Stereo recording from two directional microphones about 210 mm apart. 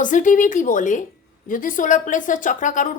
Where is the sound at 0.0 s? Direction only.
40° left (ahead or behind).